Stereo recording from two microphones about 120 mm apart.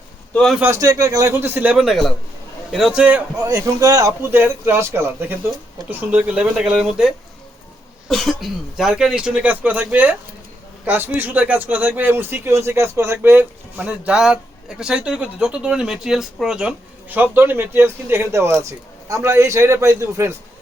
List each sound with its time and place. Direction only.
0.3 s speech: centre (ahead or behind)
0.6 s a man's voice: 25° right (ahead or behind)
1.8 s speech: centre (ahead or behind)
3.3 s a man's voice: 25° right (ahead or behind)